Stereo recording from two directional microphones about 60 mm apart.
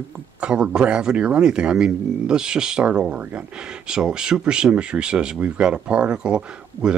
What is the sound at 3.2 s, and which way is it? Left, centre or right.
Speech, right.